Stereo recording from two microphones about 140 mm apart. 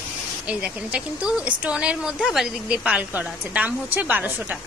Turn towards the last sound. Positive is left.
turn(degrees=-10)  # may be behind; listen again after turning